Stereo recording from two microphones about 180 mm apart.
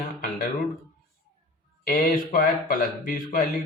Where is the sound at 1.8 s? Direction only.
50° left (ahead or behind).